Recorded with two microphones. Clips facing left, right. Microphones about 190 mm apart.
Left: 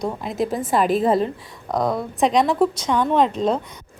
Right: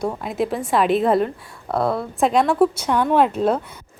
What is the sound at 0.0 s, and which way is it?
A woman's voice, centre (ahead or behind).